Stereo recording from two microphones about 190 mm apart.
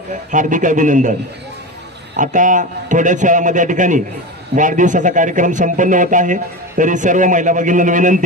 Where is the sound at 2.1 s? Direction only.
40° right (ahead or behind).